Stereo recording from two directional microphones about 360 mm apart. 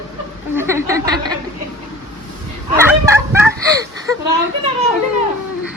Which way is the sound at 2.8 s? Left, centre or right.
Centre.